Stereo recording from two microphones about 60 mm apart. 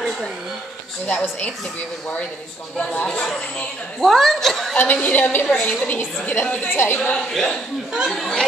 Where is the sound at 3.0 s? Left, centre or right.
Centre.